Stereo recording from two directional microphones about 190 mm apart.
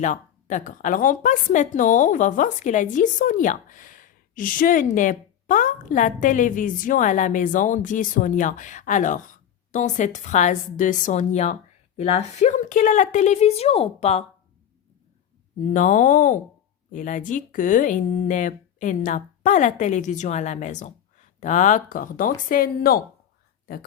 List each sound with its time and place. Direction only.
0.0 s a woman's voice: 40° left (ahead or behind)
15.7 s a woman's voice: 40° left (ahead or behind)